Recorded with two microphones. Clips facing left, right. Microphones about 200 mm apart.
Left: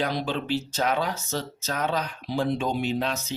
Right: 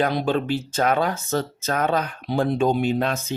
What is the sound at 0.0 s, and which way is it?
Speech, 55° right (ahead or behind).